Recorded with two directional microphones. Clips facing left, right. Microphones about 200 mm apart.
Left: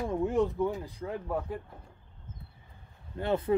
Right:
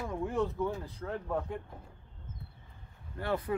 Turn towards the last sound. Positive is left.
turn(degrees=25)  # may be behind; listen again after turning